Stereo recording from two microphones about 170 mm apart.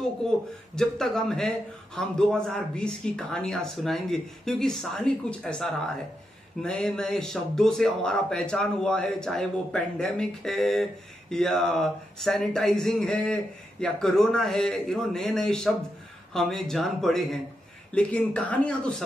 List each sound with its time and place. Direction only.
0.7 s speech: 5° left (ahead or behind)